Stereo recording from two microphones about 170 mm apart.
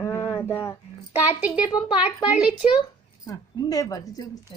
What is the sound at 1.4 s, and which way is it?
A child's voice, 5° right (ahead or behind).